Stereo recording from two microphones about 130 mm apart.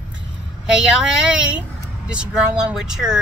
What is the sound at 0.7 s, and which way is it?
Speech, 5° right (ahead or behind).